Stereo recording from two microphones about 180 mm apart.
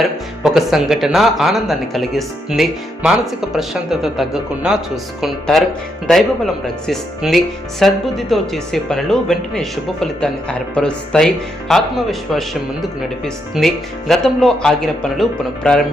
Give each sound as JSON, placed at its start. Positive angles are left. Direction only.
{"t": 0.0, "sound": "speech", "side_deg": 0}